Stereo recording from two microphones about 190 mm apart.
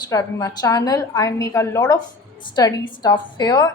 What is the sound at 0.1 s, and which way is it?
A woman's voice, 20° left (ahead or behind).